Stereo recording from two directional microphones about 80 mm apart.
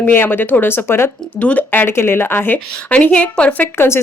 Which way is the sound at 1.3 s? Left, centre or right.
Centre.